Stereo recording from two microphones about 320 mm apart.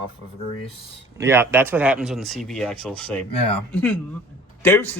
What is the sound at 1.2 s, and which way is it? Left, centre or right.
Speech, centre.